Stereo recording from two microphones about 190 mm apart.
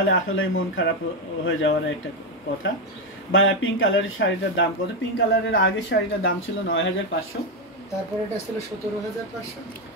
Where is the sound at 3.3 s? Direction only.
90° left.